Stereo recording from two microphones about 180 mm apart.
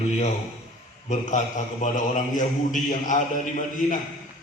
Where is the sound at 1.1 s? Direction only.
45° left (ahead or behind).